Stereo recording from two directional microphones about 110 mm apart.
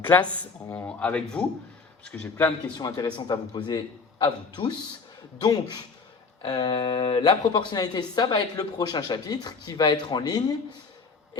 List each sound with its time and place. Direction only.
0.2 s speech: 15° left (ahead or behind)
2.7 s speech: 35° left (ahead or behind)